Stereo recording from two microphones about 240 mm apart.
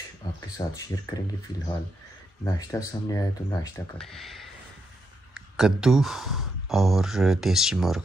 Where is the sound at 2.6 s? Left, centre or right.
Centre.